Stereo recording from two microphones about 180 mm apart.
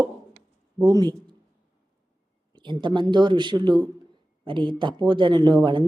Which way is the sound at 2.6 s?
25° right (ahead or behind).